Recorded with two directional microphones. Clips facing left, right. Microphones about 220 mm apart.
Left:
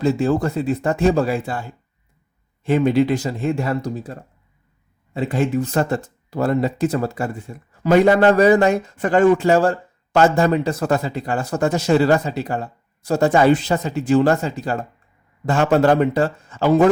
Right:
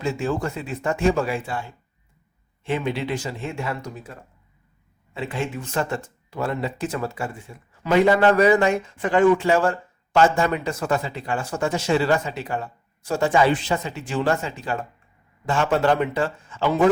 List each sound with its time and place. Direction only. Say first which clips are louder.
0.0 s speech: left 7 dB; 35° left (ahead or behind)
2.6 s speech: left 9 dB; 40° left (ahead or behind)